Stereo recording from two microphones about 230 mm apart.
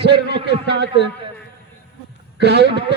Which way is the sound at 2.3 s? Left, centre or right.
Right.